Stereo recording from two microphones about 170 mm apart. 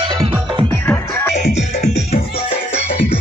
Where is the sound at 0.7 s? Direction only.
10° left (ahead or behind).